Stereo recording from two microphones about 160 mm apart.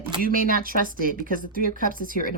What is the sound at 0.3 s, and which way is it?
Speech, 65° right (ahead or behind).